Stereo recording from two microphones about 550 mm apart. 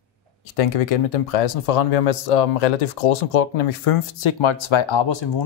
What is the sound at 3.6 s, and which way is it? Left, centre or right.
Speech, left.